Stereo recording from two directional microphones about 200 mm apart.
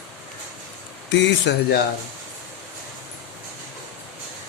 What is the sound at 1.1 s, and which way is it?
Speech, 60° left (ahead or behind).